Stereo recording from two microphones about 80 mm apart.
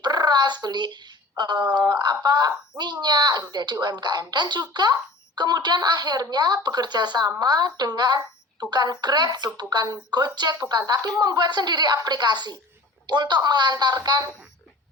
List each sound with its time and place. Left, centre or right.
0.0 s a woman's voice: right